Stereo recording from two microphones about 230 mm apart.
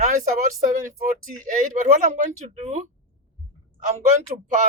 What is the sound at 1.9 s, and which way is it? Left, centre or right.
Speech, right.